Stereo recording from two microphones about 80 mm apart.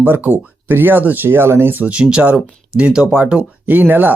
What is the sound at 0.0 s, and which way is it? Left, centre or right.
Speech, right.